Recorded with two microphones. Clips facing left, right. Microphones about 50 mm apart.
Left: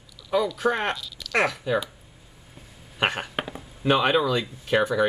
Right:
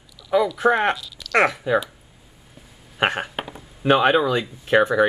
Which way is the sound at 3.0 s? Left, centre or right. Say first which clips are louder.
Right 3 dB; centre.